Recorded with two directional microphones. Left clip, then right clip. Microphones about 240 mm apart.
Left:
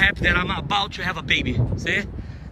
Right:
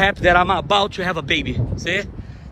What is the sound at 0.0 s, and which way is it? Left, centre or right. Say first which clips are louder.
A man's voice: right 5 dB; centre.